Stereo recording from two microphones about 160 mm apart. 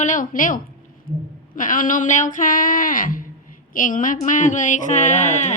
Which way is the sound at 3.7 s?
55° left (ahead or behind).